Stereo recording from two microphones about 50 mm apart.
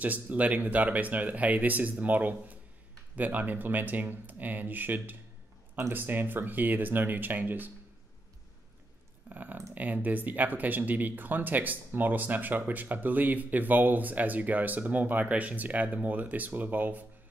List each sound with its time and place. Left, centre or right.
0.0 s speech: right
5.8 s speech: right
6.0 s speech: right
9.3 s speech: right